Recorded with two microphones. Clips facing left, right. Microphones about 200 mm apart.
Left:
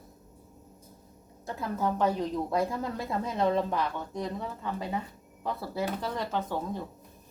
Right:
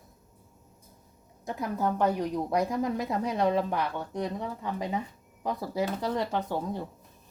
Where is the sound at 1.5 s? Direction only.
15° right (ahead or behind).